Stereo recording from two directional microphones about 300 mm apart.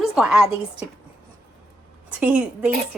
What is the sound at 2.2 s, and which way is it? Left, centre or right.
Speech, centre.